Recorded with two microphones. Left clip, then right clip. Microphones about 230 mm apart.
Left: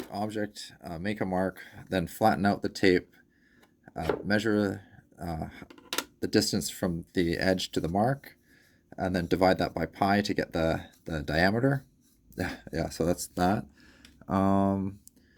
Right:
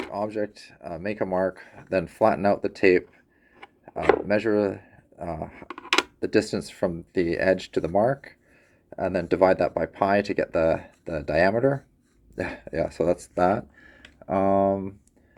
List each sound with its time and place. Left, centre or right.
0.1 s speech: left
4.3 s speech: left